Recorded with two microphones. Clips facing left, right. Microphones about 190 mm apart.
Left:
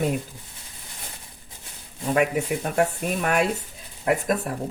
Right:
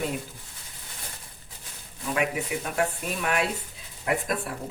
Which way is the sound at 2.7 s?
45° left (ahead or behind).